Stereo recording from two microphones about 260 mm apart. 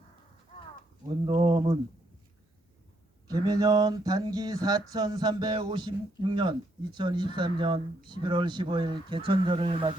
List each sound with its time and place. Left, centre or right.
1.3 s speech: centre
3.2 s a sound: centre
7.3 s speech: centre